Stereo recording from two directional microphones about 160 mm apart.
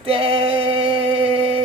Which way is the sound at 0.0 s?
35° right (ahead or behind).